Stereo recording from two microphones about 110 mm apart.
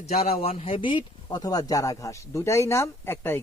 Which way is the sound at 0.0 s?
75° left (ahead or behind).